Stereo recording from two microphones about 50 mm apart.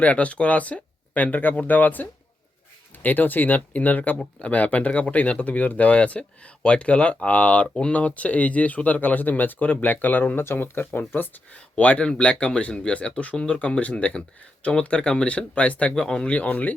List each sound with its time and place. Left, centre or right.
0.0 s speech: left
11.8 s speech: left
12.0 s speech: centre
16.0 s speech: centre
16.2 s speech: left